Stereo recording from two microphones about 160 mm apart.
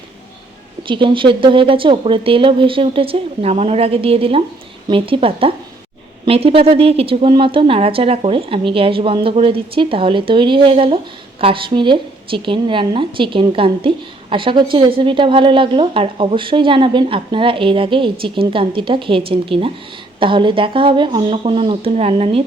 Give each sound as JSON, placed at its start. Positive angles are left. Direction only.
{"t": 0.9, "sound": "a woman's voice", "side_deg": -30}